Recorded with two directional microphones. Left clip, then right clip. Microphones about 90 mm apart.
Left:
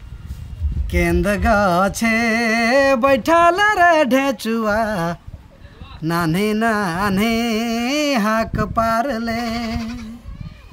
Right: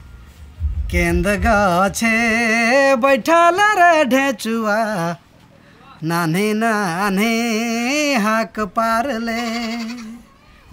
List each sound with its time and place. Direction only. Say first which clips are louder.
0.8 s music: even; centre (ahead or behind)
9.5 s music: right 1 dB; 20° right (ahead or behind)